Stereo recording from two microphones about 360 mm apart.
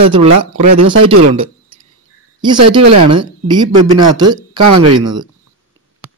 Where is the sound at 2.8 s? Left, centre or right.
Right.